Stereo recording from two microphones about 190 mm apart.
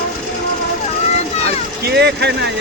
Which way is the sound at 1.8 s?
60° right (ahead or behind).